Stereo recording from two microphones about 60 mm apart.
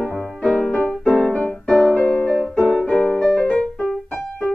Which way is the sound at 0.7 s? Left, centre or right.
Centre.